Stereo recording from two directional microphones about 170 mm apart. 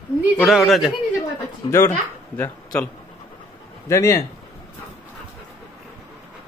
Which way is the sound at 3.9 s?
20° left (ahead or behind).